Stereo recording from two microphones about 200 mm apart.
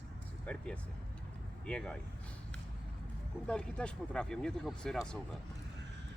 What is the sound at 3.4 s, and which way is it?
Speech, 5° left (ahead or behind).